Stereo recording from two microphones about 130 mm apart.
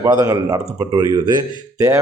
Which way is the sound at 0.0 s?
30° right (ahead or behind).